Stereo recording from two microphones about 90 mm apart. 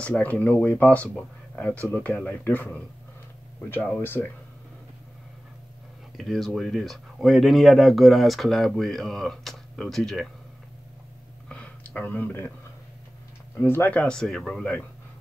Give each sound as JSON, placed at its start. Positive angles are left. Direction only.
{"t": 0.0, "sound": "speech", "side_deg": 15}
{"t": 4.0, "sound": "speech", "side_deg": 20}
{"t": 6.1, "sound": "speech", "side_deg": 0}
{"t": 11.4, "sound": "a sound", "side_deg": 10}
{"t": 13.6, "sound": "speech", "side_deg": 25}